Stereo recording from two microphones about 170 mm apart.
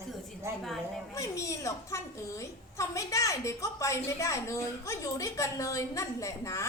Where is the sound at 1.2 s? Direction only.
20° left (ahead or behind).